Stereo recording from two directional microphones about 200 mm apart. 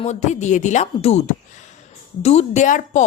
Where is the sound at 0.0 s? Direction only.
35° left (ahead or behind).